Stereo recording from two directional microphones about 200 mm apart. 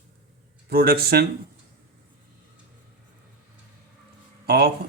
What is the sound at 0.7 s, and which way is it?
Speech, 50° right (ahead or behind).